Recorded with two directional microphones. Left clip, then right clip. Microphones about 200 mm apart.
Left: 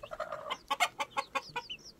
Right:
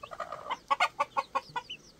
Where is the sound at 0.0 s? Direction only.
25° left (ahead or behind).